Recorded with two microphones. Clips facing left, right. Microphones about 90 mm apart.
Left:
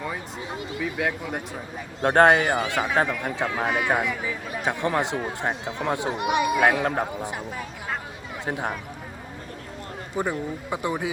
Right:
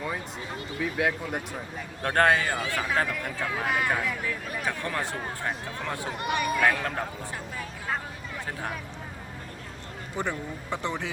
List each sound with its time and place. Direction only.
0.0 s speech: centre (ahead or behind)
2.0 s a man's voice: 20° left (ahead or behind)
4.6 s a man's voice: 20° left (ahead or behind)
8.4 s a man's voice: 20° left (ahead or behind)
10.2 s speech: 10° left (ahead or behind)